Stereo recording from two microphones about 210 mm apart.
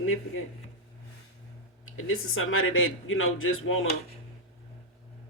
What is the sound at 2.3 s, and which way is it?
Speech, 70° left (ahead or behind).